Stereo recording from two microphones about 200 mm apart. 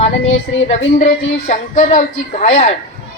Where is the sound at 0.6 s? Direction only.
35° left (ahead or behind).